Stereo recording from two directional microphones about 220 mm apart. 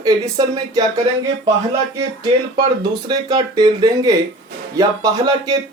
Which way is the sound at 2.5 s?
20° right (ahead or behind).